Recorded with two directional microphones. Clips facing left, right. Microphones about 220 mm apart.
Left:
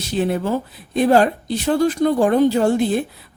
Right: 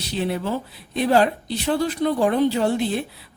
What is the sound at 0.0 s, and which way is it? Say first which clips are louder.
A woman's voice: left 4 dB; 45° left (ahead or behind).